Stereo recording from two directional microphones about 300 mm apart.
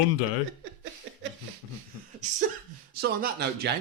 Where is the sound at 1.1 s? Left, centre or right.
Right.